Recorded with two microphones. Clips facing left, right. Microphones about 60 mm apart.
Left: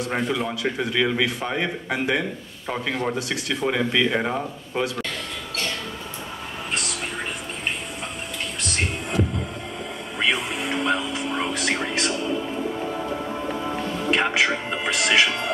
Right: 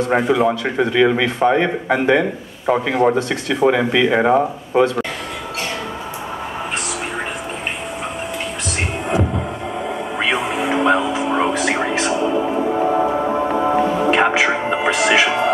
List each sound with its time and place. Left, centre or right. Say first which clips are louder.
0.2 s speech: right 9 dB; centre
0.5 s speech: right 7 dB; centre
3.2 s speech: right 7 dB; centre
3.6 s speech: right 7 dB; centre
4.2 s speech: right 11 dB; right
10.1 s music: right 3 dB; centre
12.5 s music: right 10 dB; right
13.7 s music: right 7 dB; centre